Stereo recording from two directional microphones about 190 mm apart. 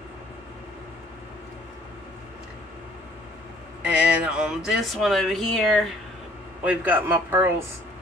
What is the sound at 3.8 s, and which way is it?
Speech, 5° right (ahead or behind).